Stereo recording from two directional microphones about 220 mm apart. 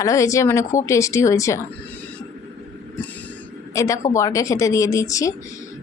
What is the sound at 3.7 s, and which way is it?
A woman's voice, 15° left (ahead or behind).